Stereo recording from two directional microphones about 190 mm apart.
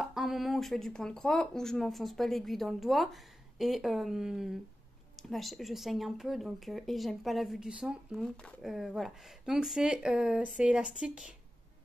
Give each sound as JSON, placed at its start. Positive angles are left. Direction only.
{"t": 0.0, "sound": "speech", "side_deg": 0}